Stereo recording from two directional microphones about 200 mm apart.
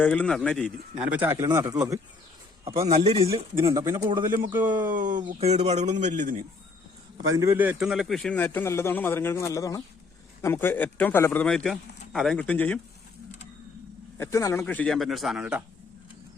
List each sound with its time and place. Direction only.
0.0 s speech: 5° left (ahead or behind)
1.0 s a man's voice: 10° right (ahead or behind)
2.6 s speech: 30° right (ahead or behind)
5.1 s speech: 30° right (ahead or behind)
7.3 s a man's voice: 10° right (ahead or behind); by 12.8 s 5° left (ahead or behind)
14.2 s a man's voice: 15° left (ahead or behind); by 15.6 s 5° right (ahead or behind)